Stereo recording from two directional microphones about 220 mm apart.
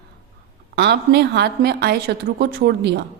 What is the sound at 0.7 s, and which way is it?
A woman's voice, 50° right (ahead or behind).